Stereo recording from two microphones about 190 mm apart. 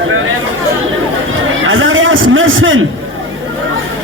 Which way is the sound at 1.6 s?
90° right.